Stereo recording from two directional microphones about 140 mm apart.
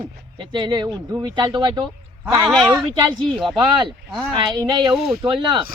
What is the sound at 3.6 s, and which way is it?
Speech, 35° right (ahead or behind).